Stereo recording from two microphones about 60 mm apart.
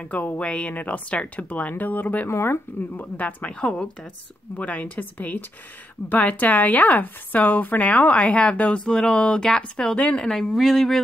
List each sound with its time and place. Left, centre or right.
0.1 s speech: left
2.2 s speech: left
3.0 s speech: left
4.6 s speech: left; by 11.0 s centre